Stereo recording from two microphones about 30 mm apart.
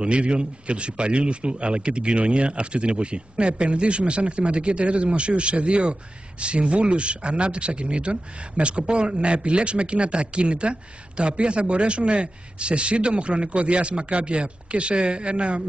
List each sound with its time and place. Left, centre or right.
0.0 s speech: right